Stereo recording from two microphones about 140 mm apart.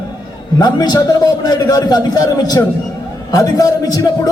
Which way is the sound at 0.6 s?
30° left (ahead or behind).